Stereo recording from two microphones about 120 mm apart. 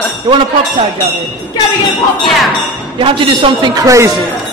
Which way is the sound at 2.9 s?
45° right (ahead or behind).